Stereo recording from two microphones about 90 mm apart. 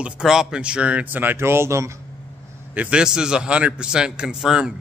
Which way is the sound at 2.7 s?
15° right (ahead or behind).